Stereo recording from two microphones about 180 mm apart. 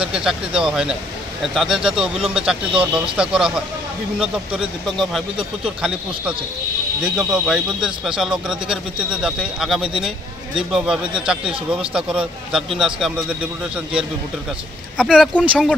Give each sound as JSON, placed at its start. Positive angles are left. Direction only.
{"t": 0.0, "sound": "speech", "side_deg": -5}
{"t": 2.1, "sound": "speech", "side_deg": -30}
{"t": 2.4, "sound": "speech", "side_deg": -5}
{"t": 15.0, "sound": "speech", "side_deg": 0}